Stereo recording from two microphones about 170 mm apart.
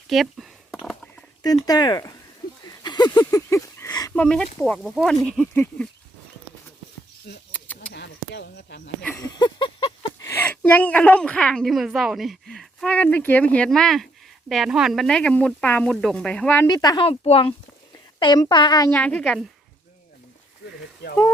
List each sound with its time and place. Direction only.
0.1 s a sound: centre (ahead or behind)
1.4 s speech: 20° left (ahead or behind)
2.8 s a sound: 25° left (ahead or behind)
4.1 s a woman's voice: 5° left (ahead or behind)
7.8 s a sound: 80° left
9.1 s a sound: 25° left (ahead or behind)
10.2 s a woman's voice: 10° left (ahead or behind)
16.6 s speech: 20° left (ahead or behind)
17.1 s speech: 35° left (ahead or behind)
17.9 s speech: 25° left (ahead or behind)
18.9 s a woman's voice: 10° left (ahead or behind)
20.7 s speech: 75° left (ahead or behind)